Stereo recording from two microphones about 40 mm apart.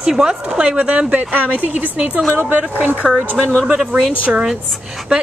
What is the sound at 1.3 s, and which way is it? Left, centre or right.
A woman's voice, right.